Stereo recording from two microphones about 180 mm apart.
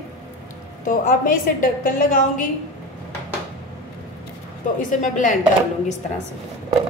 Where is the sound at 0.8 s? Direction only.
50° left (ahead or behind).